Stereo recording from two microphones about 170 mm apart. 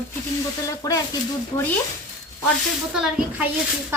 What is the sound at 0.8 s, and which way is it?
Speech, 20° left (ahead or behind).